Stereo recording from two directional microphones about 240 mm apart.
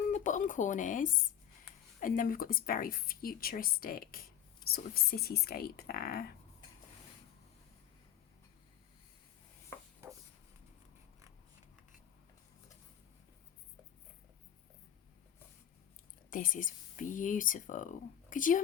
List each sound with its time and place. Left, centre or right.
0.1 s speech: left
16.3 s speech: left